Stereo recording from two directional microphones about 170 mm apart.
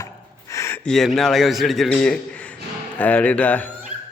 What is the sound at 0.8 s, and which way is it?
A man's voice, centre (ahead or behind).